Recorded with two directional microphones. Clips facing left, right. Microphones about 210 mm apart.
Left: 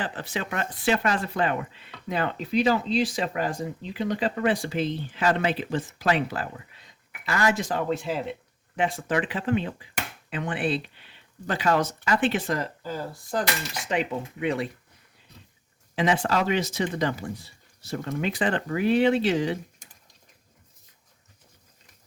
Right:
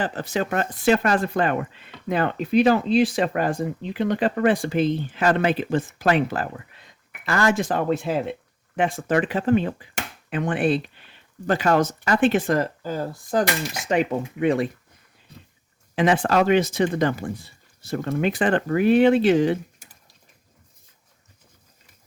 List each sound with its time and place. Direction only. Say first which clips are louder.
0.0 s speech: right 6 dB; 45° right (ahead or behind)
16.0 s speech: right 5 dB; 55° right (ahead or behind)